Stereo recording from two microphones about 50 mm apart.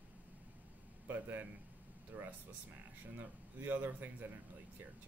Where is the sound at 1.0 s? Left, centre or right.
Right.